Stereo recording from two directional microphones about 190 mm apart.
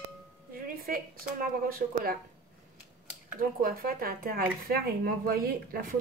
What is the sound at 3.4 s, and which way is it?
Speech, 50° right (ahead or behind).